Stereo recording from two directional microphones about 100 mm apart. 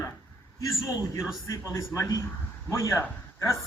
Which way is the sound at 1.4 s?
30° left (ahead or behind).